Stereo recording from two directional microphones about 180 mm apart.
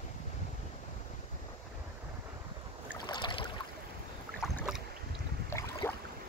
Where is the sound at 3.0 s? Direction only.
25° left (ahead or behind).